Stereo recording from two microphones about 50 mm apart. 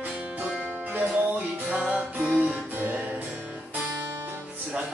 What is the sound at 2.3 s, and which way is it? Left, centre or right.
Music, right.